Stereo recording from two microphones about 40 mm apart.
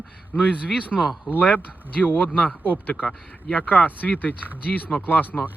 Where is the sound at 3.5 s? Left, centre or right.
Left.